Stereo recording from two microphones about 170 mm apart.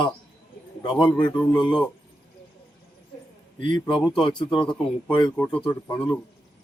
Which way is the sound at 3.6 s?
30° left (ahead or behind).